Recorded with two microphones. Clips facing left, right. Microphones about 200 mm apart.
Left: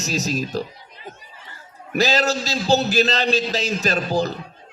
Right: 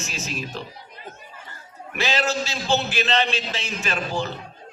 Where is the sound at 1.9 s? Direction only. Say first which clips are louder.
Left 5 dB; 40° left (ahead or behind).